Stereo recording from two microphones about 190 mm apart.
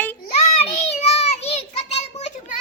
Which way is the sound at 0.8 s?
35° left (ahead or behind).